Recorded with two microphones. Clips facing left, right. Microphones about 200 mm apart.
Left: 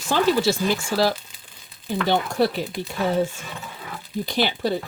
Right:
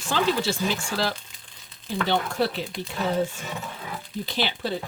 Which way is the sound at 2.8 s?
10° left (ahead or behind).